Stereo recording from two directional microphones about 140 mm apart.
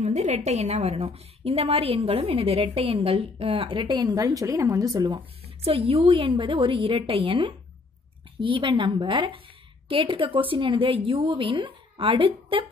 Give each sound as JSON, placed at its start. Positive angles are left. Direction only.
{"t": 0.0, "sound": "a woman's voice", "side_deg": -55}
{"t": 5.6, "sound": "a woman's voice", "side_deg": -45}